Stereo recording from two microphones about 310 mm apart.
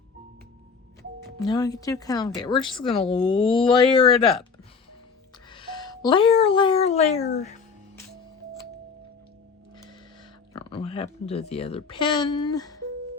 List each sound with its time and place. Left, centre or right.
1.5 s speech: centre
5.5 s speech: centre
10.5 s speech: centre